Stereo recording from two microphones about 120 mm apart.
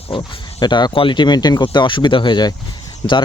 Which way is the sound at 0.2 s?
40° left (ahead or behind).